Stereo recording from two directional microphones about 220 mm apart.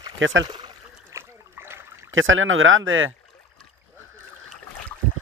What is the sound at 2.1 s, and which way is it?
Speech, 65° right (ahead or behind).